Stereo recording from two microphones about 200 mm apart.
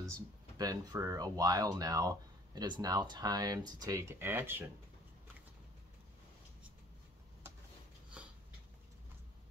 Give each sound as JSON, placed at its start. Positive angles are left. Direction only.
{"t": 0.0, "sound": "speech", "side_deg": -20}